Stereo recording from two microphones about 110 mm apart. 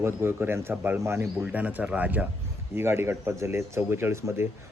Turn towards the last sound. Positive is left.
turn(degrees=-20)  # may be behind; listen again after turning